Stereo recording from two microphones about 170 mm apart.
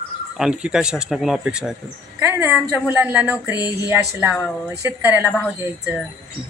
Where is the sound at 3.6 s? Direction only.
25° left (ahead or behind).